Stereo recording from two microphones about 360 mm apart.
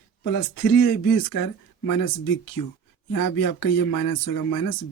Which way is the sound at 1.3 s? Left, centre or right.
Left.